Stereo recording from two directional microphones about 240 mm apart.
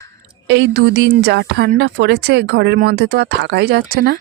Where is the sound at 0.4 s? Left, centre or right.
Right.